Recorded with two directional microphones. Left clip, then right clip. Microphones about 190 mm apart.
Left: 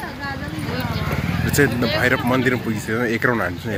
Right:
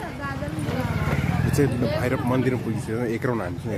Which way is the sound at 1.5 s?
Centre (ahead or behind).